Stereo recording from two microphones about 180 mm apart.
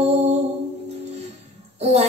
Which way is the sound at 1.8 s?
40° right (ahead or behind).